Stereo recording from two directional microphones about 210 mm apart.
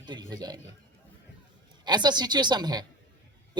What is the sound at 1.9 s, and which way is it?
Speech, 20° right (ahead or behind).